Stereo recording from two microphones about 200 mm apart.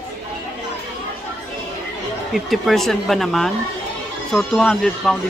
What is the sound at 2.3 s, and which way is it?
Speech, centre (ahead or behind).